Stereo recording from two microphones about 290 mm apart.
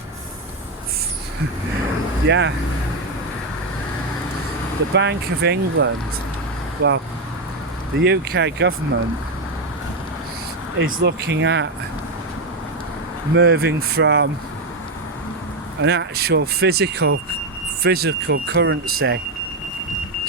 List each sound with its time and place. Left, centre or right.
2.2 s speech: right
4.9 s speech: right
8.0 s speech: right
10.9 s speech: right
13.3 s speech: right
15.8 s speech: right